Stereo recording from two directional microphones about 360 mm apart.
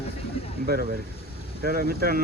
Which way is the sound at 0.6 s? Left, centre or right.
Right.